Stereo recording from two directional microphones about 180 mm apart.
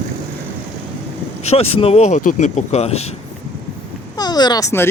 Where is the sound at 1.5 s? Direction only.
35° left (ahead or behind).